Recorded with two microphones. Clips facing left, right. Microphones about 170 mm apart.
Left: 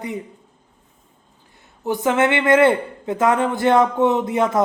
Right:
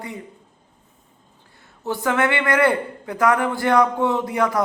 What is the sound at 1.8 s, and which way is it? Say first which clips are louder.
A man's voice: left 3 dB; 20° left (ahead or behind).